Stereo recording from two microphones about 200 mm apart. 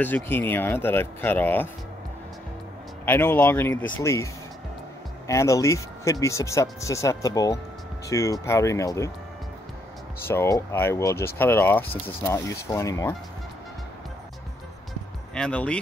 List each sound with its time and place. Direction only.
0.0 s speech: 10° left (ahead or behind)
3.1 s speech: 10° left (ahead or behind)
10.2 s speech: 15° left (ahead or behind)
15.3 s speech: 5° left (ahead or behind)